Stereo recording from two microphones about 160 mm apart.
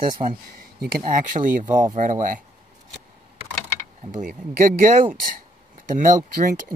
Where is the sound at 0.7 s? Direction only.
65° right (ahead or behind).